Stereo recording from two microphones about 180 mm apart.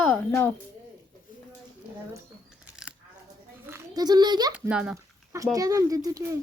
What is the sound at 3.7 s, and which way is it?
Speech, 20° right (ahead or behind).